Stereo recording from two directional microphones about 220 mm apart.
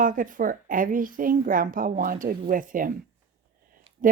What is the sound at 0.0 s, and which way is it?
A woman's voice, 35° right (ahead or behind).